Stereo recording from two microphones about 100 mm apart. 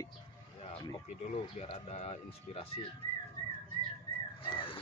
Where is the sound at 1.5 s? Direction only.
85° left.